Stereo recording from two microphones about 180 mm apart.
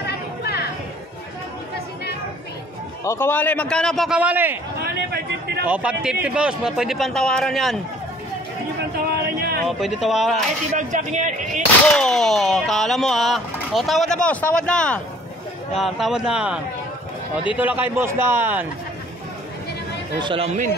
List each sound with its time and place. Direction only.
0.1 s a sound: 60° left (ahead or behind)
3.0 s speech: 15° left (ahead or behind); by 4.6 s 10° right (ahead or behind)
4.7 s a sound: 60° right (ahead or behind)
5.7 s speech: 5° right (ahead or behind)
8.9 s speech: 60° right (ahead or behind)
9.7 s speech: centre (ahead or behind)
10.8 s whip: 45° right (ahead or behind)
11.9 s a man's voice: 5° left (ahead or behind)
20.2 s speech: 30° right (ahead or behind)